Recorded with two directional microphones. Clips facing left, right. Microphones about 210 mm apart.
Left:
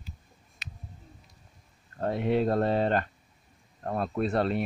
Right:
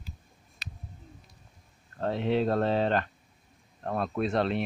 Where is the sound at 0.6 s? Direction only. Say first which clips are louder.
Right 1 dB; 35° right (ahead or behind).